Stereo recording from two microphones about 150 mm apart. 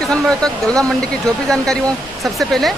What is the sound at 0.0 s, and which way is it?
Speech, 5° left (ahead or behind).